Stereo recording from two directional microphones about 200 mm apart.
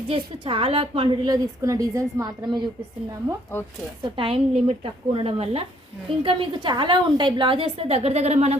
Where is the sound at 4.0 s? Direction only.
25° right (ahead or behind).